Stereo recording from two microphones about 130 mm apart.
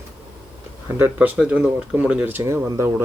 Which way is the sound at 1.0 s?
15° right (ahead or behind).